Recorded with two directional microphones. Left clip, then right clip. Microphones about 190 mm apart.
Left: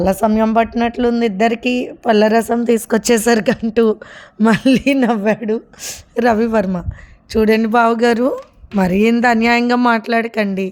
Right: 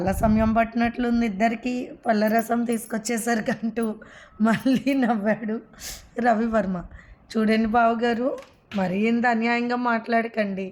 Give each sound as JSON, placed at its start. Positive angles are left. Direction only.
{"t": 0.0, "sound": "speech", "side_deg": 45}